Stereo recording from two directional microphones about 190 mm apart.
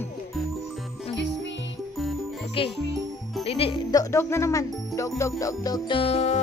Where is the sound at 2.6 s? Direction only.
30° left (ahead or behind).